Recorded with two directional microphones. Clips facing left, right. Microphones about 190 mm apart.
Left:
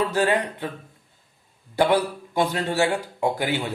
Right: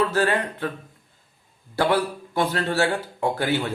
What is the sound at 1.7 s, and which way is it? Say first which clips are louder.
Speech: left 1 dB; 15° left (ahead or behind).